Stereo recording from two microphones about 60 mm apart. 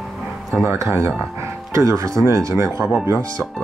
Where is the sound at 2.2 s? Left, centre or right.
Right.